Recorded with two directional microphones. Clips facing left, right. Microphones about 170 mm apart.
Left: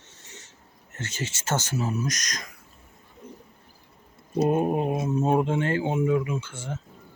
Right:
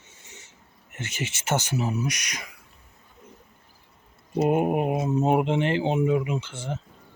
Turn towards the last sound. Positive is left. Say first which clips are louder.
# even
turn(degrees=-20)  # may be behind; listen again after turning